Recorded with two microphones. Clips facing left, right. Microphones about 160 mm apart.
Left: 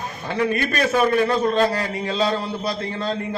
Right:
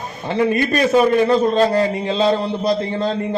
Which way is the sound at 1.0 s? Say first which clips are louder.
Right 5 dB; 20° right (ahead or behind).